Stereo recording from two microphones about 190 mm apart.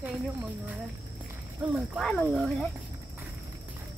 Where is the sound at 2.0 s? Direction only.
Centre (ahead or behind).